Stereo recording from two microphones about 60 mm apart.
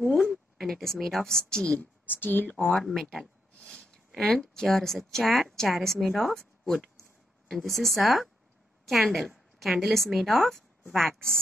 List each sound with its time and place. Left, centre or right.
0.0 s a woman's voice: centre
2.0 s speech: left
2.5 s speech: centre
3.1 s a sound: centre
3.8 s a woman's voice: centre
7.4 s a woman's voice: centre